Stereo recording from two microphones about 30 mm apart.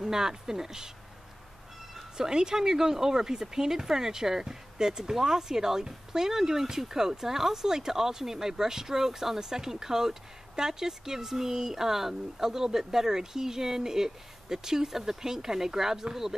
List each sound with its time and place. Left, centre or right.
0.0 s speech: centre
2.1 s speech: right